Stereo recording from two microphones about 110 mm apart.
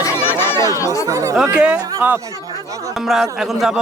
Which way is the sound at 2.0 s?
20° right (ahead or behind).